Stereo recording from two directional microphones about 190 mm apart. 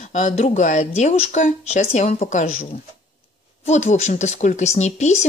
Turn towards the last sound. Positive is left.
turn(degrees=35)  # may be behind; listen again after turning